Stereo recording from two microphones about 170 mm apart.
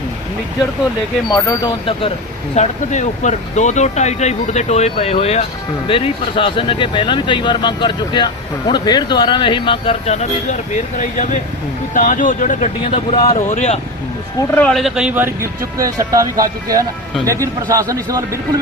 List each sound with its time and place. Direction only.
1.3 s speech: 20° left (ahead or behind)
1.9 s speech: 35° left (ahead or behind)
2.6 s speech: 45° left (ahead or behind)
12.8 s speech: 30° left (ahead or behind)
13.3 s speech: 40° left (ahead or behind)
14.5 s a man's voice: 5° left (ahead or behind); by 18.2 s 20° right (ahead or behind)